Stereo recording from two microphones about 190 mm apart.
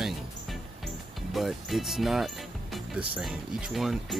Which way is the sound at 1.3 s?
Centre (ahead or behind).